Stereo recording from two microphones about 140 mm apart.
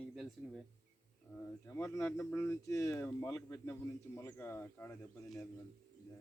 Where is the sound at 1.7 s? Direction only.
20° left (ahead or behind).